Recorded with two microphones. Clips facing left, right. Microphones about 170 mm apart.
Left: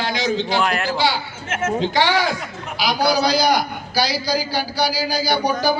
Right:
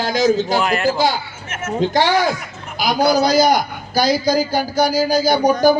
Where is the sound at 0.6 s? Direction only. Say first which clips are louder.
Right 3 dB; centre (ahead or behind).